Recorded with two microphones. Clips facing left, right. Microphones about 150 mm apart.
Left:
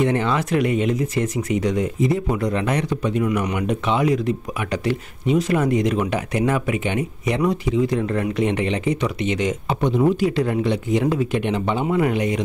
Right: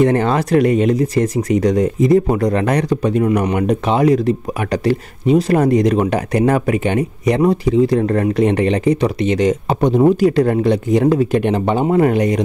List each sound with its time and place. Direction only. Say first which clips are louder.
0.0 s speech: right 6 dB; 40° right (ahead or behind)